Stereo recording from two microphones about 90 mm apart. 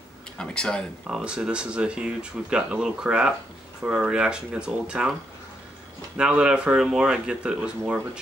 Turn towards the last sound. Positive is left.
turn(degrees=-10)  # may be behind; listen again after turning